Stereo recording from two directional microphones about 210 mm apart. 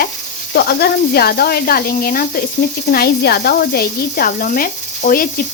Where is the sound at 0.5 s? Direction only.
50° left (ahead or behind).